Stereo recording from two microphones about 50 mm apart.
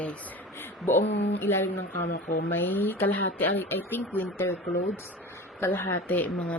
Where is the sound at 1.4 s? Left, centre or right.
Left.